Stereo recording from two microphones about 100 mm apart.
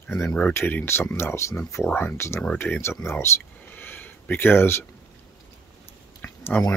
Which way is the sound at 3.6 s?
20° left (ahead or behind).